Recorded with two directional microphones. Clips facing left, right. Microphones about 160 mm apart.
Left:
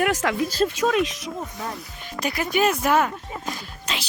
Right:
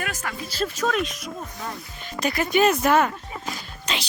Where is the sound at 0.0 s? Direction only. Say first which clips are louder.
Left 9 dB; 90° left.